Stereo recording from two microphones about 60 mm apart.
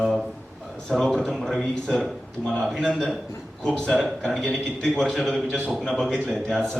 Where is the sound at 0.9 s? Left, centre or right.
Centre.